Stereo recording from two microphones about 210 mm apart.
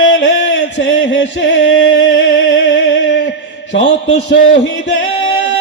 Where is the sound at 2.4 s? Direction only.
65° left (ahead or behind).